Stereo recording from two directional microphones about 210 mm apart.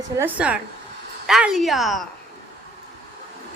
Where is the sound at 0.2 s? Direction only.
5° right (ahead or behind).